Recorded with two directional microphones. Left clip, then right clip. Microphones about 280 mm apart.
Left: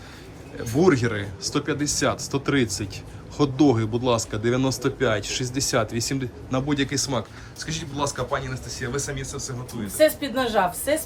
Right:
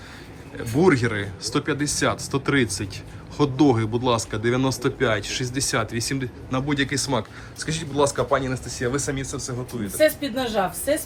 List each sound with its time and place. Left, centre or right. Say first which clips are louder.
0.5 s speech: right 1 dB; centre
10.0 s speech: left 1 dB; centre